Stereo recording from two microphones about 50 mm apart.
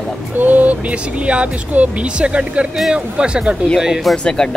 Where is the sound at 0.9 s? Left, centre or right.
Right.